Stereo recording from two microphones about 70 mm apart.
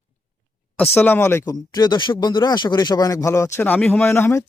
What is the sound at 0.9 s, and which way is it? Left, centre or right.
Speech, left.